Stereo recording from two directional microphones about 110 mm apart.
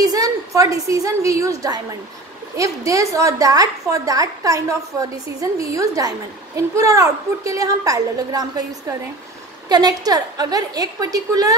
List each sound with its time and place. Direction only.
0.0 s a woman's voice: 35° right (ahead or behind)